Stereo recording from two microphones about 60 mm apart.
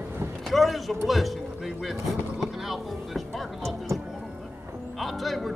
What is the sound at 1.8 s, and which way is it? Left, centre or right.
Vehicle, centre.